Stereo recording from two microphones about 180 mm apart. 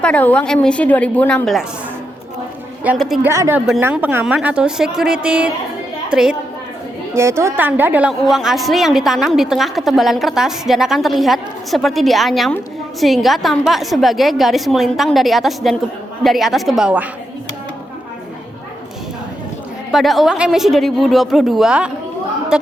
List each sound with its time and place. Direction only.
0.0 s a woman's voice: 10° left (ahead or behind)
2.8 s a woman's voice: 5° right (ahead or behind)
3.2 s a woman's voice: 15° right (ahead or behind)
7.1 s a woman's voice: 15° right (ahead or behind)
19.9 s a woman's voice: centre (ahead or behind)